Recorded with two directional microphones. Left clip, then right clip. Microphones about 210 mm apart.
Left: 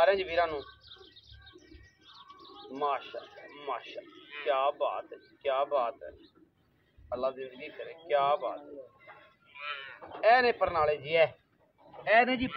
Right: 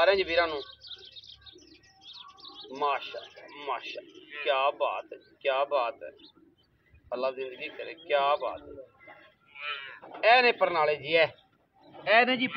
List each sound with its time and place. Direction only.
0.0 s speech: 40° right (ahead or behind)
0.6 s bird: 20° right (ahead or behind)
2.7 s a man's voice: 35° right (ahead or behind)
7.1 s a man's voice: 35° right (ahead or behind)
9.5 s a sound: 45° left (ahead or behind)
10.2 s speech: 35° right (ahead or behind)
12.1 s speech: 20° right (ahead or behind)